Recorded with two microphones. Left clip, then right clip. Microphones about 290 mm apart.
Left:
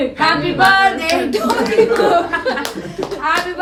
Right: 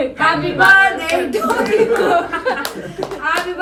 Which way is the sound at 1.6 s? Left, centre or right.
Right.